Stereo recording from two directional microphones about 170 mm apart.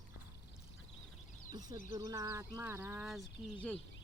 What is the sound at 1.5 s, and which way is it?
Speech, 20° right (ahead or behind).